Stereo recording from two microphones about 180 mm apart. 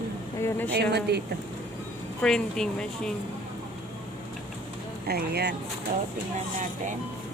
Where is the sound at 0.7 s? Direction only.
65° right (ahead or behind).